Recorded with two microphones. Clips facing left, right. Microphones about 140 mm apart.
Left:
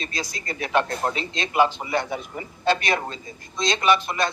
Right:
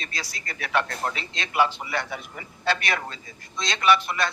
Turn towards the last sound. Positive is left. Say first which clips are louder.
# left 1 dB
turn(degrees=20)  # may be behind; listen again after turning